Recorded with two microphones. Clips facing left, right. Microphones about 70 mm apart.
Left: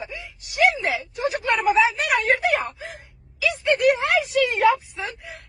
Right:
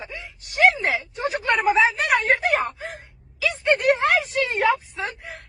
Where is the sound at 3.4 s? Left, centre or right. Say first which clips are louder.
Left 1 dB; right.